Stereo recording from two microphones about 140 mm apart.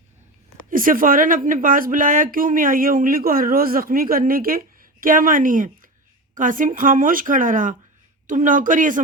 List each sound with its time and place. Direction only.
0.7 s speech: 75° right (ahead or behind)